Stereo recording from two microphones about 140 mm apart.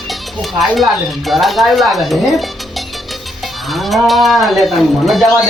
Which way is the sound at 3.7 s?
Centre (ahead or behind).